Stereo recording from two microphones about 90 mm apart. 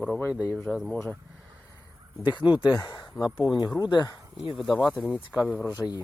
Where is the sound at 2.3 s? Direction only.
60° left (ahead or behind).